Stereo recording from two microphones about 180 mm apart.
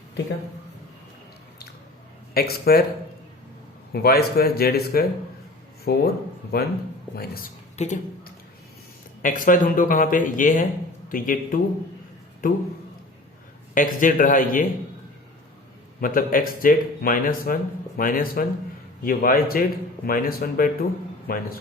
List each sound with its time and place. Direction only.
2.3 s speech: 60° left (ahead or behind)
3.9 s speech: 60° left (ahead or behind)
7.8 s speech: 40° left (ahead or behind)
9.2 s speech: 45° left (ahead or behind)
13.7 s speech: 50° left (ahead or behind)
16.0 s speech: 50° left (ahead or behind)